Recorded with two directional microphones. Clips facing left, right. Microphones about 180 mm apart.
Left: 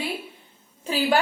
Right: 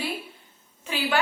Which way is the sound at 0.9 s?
35° left (ahead or behind).